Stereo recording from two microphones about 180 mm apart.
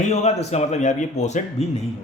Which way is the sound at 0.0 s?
40° left (ahead or behind).